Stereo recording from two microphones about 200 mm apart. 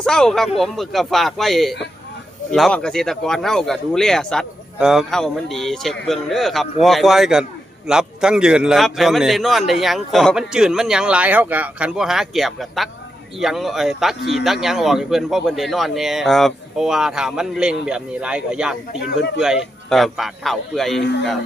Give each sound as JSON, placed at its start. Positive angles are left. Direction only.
{"t": 0.0, "sound": "a man's voice", "side_deg": 5}